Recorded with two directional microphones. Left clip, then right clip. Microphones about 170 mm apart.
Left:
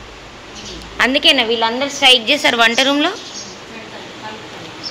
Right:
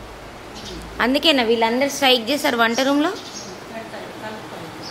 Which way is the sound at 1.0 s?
15° right (ahead or behind).